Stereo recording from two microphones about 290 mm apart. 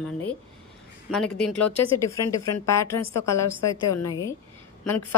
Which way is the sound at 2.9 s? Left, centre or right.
Left.